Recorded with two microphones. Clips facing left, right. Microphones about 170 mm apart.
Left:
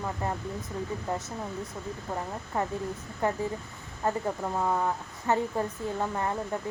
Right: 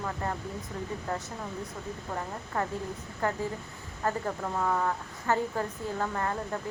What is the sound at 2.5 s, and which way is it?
A woman's voice, 15° left (ahead or behind).